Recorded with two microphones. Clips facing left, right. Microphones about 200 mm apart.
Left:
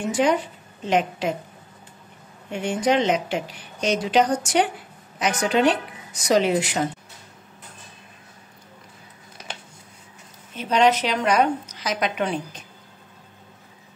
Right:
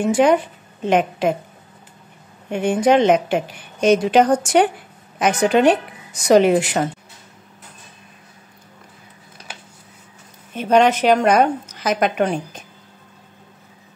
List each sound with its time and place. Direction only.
0.1 s a woman's voice: 55° right (ahead or behind)
2.5 s a woman's voice: 55° right (ahead or behind)
10.5 s a woman's voice: 50° right (ahead or behind)